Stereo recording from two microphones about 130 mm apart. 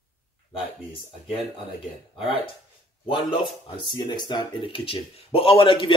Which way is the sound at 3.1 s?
40° left (ahead or behind).